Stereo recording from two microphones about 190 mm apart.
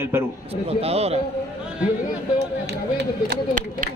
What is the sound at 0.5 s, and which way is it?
Speech, 30° right (ahead or behind).